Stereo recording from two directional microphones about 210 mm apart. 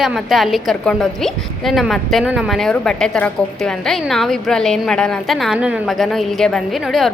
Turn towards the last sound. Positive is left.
turn(degrees=0)  # may be behind; listen again after turning